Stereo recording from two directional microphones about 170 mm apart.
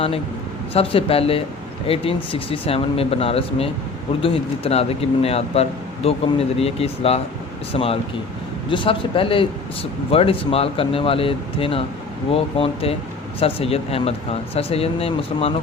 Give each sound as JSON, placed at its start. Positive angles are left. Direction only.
{"t": 0.7, "sound": "speech", "side_deg": 35}